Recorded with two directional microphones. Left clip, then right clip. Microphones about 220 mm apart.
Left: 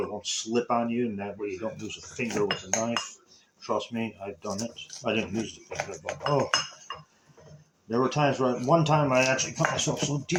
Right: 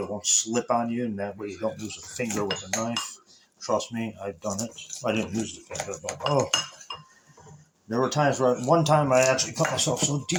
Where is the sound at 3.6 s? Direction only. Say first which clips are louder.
Right 3 dB; 25° right (ahead or behind).